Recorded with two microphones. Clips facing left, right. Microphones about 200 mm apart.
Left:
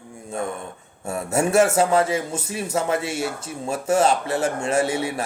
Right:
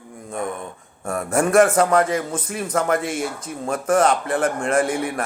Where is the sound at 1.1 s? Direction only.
25° left (ahead or behind).